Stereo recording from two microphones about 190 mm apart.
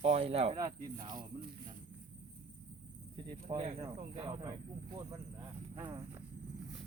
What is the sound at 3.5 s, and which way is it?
Speech, 30° right (ahead or behind).